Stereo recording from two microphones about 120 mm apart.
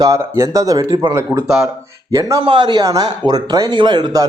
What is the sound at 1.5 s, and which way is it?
Speech, 5° right (ahead or behind).